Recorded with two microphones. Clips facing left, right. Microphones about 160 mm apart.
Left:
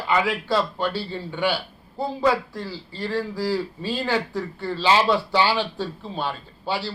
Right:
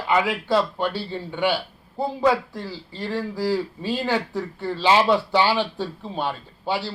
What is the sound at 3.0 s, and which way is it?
A man's voice, 20° right (ahead or behind).